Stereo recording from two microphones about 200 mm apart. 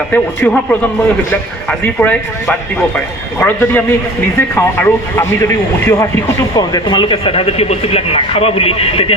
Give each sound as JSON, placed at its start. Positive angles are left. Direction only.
{"t": 0.1, "sound": "speech", "side_deg": 10}